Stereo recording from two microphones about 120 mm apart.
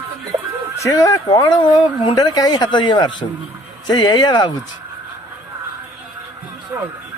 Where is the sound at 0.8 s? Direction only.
30° left (ahead or behind).